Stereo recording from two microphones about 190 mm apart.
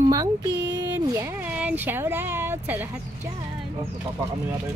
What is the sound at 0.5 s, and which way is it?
Speech, 65° right (ahead or behind).